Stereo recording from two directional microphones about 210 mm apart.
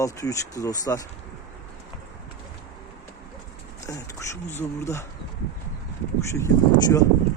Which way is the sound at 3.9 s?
15° left (ahead or behind).